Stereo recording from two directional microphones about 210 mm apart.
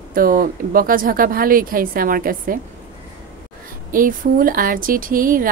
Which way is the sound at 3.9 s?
40° right (ahead or behind).